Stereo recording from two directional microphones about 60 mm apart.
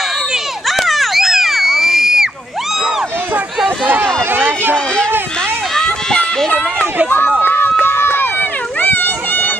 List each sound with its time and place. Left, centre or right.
0.7 s a sound: centre
4.3 s run: right
6.0 s run: centre
7.4 s run: left